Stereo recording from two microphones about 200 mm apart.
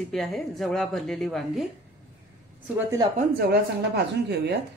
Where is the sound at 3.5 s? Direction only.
55° right (ahead or behind).